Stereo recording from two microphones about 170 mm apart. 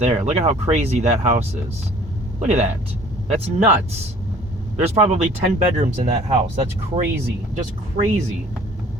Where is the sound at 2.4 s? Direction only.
40° right (ahead or behind).